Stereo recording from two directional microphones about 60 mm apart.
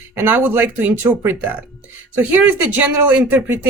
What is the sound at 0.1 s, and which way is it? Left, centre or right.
Speech, right.